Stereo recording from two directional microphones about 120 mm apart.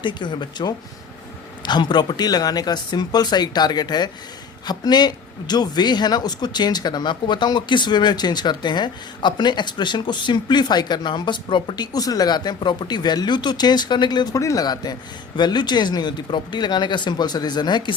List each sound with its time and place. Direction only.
0.0 s speech: 40° left (ahead or behind)